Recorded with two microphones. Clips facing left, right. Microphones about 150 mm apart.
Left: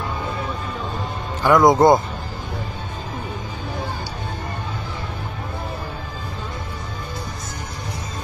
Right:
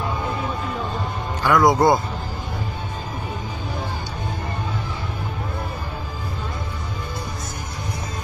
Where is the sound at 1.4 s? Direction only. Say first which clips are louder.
Left 3 dB; 20° left (ahead or behind).